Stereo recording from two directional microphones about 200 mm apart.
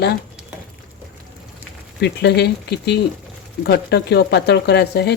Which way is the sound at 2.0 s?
55° left (ahead or behind).